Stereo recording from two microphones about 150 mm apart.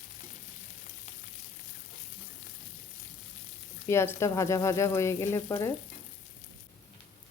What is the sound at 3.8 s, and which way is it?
Speech, 15° left (ahead or behind).